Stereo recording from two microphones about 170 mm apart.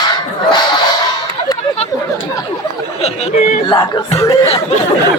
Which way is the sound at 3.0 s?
40° left (ahead or behind).